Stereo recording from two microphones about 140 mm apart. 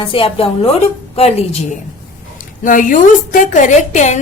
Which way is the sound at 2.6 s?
70° left (ahead or behind).